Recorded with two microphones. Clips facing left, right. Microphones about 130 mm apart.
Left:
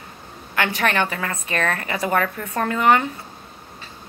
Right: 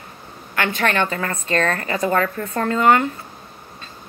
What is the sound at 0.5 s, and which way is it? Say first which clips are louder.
A woman's voice: right 1 dB; 20° left (ahead or behind).